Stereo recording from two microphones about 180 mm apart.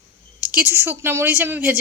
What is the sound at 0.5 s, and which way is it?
Speech, 10° right (ahead or behind).